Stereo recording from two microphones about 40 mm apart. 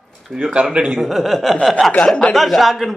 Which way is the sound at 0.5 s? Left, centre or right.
Right.